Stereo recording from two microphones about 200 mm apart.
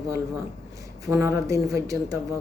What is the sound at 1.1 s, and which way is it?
Speech, 15° right (ahead or behind).